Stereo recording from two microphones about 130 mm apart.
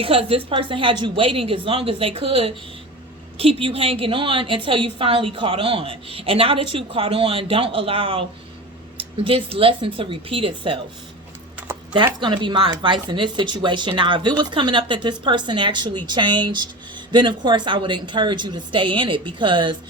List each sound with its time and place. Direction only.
0.0 s a woman's voice: 45° right (ahead or behind)
12.2 s speech: 35° right (ahead or behind)